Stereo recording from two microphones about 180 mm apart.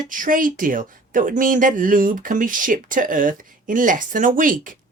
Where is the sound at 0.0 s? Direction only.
50° right (ahead or behind).